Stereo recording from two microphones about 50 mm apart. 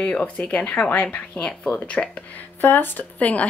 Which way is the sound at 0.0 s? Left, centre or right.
Left.